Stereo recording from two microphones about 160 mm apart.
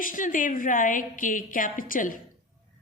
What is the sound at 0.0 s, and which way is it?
Speech, 55° left (ahead or behind).